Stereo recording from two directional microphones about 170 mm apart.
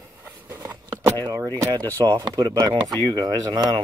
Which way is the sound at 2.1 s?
25° right (ahead or behind).